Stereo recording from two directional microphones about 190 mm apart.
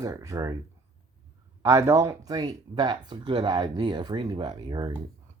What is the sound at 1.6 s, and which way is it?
Speech, 15° right (ahead or behind).